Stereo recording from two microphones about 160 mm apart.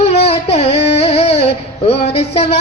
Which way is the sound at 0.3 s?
40° left (ahead or behind).